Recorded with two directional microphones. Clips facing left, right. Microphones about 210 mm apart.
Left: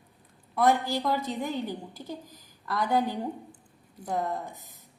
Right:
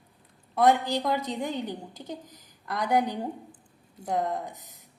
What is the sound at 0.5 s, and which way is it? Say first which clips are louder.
Speech: right 2 dB; 25° right (ahead or behind).